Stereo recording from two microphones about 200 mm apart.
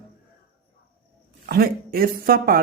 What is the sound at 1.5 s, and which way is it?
Speech, 50° right (ahead or behind).